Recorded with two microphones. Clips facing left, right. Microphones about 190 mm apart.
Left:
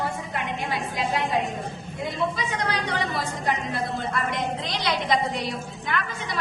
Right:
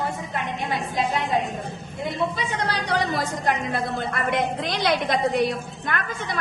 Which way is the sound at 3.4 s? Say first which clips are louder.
Right 1 dB; 55° right (ahead or behind).